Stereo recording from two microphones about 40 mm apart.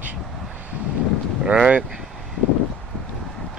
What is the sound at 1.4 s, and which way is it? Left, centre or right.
Speech, right.